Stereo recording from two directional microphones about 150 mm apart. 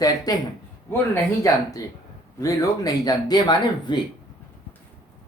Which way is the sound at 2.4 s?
25° left (ahead or behind).